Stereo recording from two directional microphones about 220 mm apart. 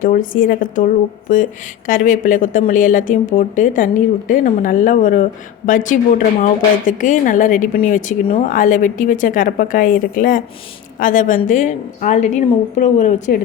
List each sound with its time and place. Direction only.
0.0 s a woman's voice: 40° left (ahead or behind)